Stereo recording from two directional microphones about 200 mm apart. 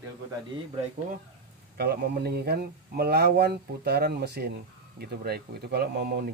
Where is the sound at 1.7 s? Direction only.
55° right (ahead or behind).